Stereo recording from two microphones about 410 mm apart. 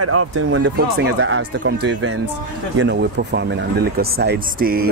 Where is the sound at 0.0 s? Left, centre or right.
Right.